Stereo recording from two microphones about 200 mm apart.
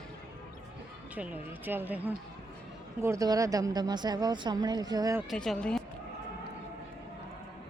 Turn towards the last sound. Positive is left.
turn(degrees=5)  # may be behind; listen again after turning